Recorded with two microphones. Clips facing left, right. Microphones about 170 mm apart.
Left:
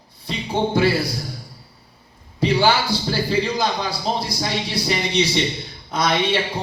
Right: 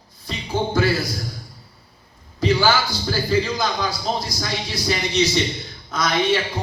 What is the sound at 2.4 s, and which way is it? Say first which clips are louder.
A man's voice: left 1 dB; 30° left (ahead or behind).